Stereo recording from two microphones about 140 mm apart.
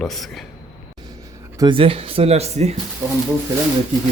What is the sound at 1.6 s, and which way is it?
Speech, 35° right (ahead or behind).